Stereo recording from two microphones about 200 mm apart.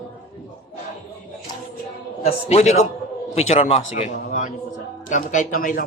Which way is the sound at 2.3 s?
35° left (ahead or behind).